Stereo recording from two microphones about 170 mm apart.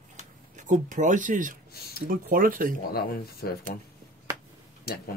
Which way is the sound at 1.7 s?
65° left (ahead or behind).